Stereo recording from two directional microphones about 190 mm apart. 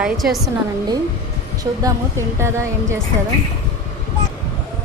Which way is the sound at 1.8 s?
15° right (ahead or behind).